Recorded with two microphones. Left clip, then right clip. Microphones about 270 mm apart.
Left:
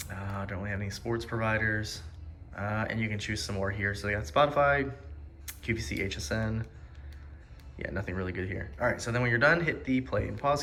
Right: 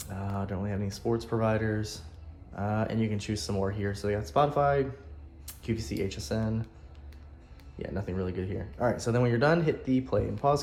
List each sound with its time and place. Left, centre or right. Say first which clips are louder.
0.1 s speech: right 3 dB; centre
7.8 s speech: even; centre